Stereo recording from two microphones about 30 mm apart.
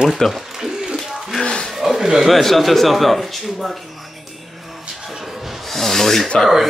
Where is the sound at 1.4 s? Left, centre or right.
Left.